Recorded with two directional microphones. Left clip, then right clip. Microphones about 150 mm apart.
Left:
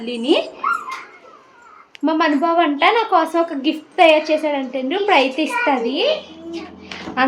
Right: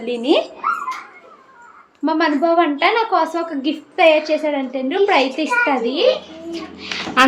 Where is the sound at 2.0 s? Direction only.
20° left (ahead or behind).